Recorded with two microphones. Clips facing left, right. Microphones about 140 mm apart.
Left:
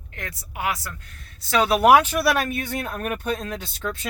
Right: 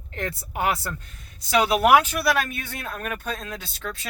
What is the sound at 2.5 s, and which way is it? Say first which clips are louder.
Speech: left 5 dB; 40° left (ahead or behind).